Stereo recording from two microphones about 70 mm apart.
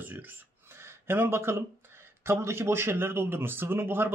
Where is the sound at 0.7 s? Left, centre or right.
Right.